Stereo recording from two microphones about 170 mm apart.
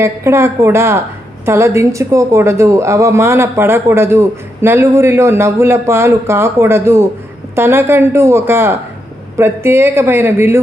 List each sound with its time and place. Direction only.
0.0 s speech: 15° right (ahead or behind)